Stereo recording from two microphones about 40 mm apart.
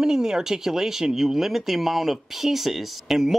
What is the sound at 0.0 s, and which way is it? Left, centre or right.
Speech, centre.